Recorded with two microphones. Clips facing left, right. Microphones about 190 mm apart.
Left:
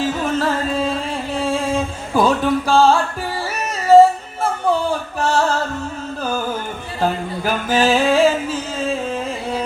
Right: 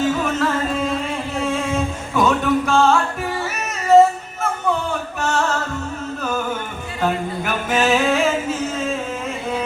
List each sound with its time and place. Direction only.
0.0 s music: 30° left (ahead or behind)
1.4 s a sound: 30° left (ahead or behind)
2.1 s music: 30° left (ahead or behind)
3.9 s yodeling: 30° left (ahead or behind)
4.6 s music: 30° left (ahead or behind)
7.0 s music: 35° left (ahead or behind)